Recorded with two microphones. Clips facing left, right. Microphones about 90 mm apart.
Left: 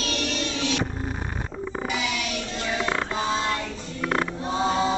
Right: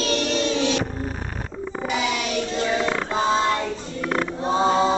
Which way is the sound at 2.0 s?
45° right (ahead or behind).